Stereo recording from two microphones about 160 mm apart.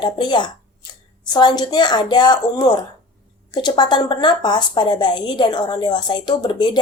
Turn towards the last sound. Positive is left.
turn(degrees=25)  # may be behind; listen again after turning